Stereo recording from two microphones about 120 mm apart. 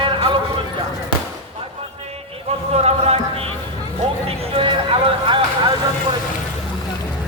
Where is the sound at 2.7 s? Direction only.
60° right (ahead or behind); by 5.7 s 45° right (ahead or behind).